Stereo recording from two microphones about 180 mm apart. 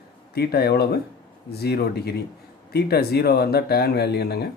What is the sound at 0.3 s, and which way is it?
Speech, 60° left (ahead or behind).